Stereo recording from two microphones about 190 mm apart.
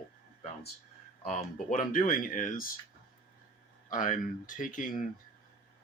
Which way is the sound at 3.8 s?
45° left (ahead or behind).